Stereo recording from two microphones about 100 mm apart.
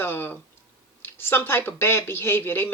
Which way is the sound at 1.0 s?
20° left (ahead or behind).